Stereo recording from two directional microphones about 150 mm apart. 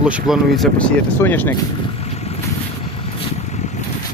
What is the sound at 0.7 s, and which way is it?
Speech, 15° left (ahead or behind).